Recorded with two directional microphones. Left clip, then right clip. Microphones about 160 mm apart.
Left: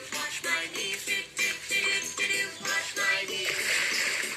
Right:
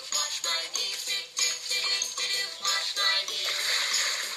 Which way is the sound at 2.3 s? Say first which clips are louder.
Right 1 dB; 35° right (ahead or behind).